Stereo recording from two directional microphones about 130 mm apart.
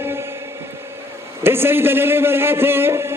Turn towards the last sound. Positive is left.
turn(degrees=-20)  # may be behind; listen again after turning